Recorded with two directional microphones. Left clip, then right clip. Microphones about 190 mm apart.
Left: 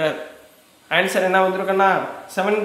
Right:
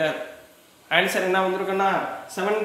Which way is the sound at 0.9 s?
20° left (ahead or behind).